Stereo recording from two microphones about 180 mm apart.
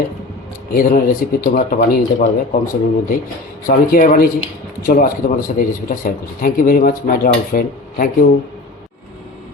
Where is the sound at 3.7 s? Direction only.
50° left (ahead or behind).